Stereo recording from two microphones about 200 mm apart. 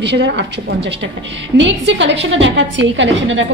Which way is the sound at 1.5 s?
65° right (ahead or behind).